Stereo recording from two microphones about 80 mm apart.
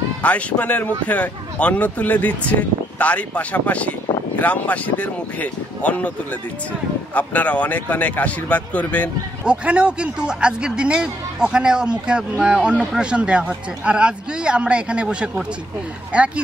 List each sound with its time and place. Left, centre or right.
0.2 s speech: centre
7.2 s speech: centre
9.4 s speech: centre